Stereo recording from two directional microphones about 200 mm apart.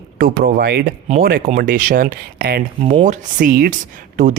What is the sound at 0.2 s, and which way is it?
Speech, 45° right (ahead or behind).